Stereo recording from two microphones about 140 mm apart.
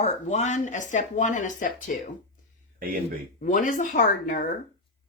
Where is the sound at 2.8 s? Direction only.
90° right.